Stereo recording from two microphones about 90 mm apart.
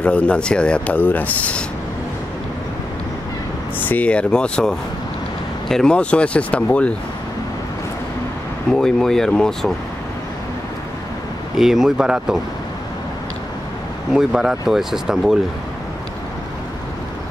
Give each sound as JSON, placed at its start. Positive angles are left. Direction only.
{"t": 0.0, "sound": "speech", "side_deg": 15}
{"t": 3.8, "sound": "speech", "side_deg": 15}
{"t": 8.7, "sound": "speech", "side_deg": 5}
{"t": 11.5, "sound": "speech", "side_deg": -5}
{"t": 14.1, "sound": "speech", "side_deg": -5}